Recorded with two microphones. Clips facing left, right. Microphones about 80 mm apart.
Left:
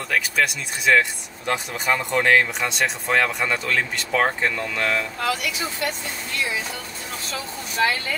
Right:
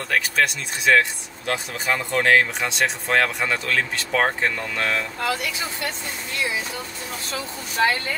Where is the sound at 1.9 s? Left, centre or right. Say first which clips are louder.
Left 1 dB; centre.